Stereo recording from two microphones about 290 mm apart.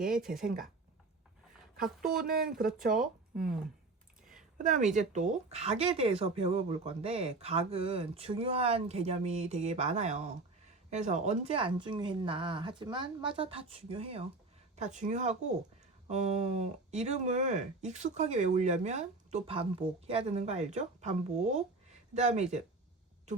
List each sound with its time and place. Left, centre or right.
0.0 s speech: centre
1.7 s speech: right
4.5 s speech: right